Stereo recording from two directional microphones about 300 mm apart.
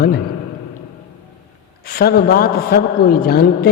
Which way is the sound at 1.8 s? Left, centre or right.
Left.